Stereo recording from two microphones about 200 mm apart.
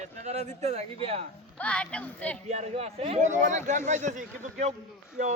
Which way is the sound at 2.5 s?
35° right (ahead or behind).